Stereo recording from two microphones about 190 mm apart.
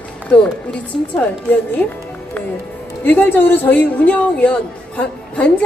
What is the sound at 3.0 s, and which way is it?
A woman's voice, 10° left (ahead or behind).